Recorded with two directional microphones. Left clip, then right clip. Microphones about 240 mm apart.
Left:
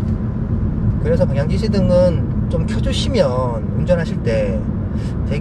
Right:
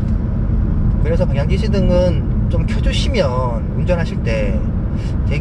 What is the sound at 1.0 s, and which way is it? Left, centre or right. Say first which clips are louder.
Speech: left 2 dB; centre.